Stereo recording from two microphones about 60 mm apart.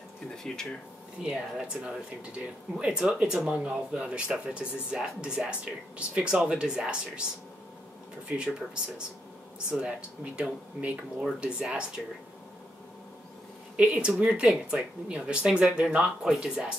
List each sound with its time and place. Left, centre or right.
1.2 s speech: centre
8.4 s speech: centre
13.7 s speech: right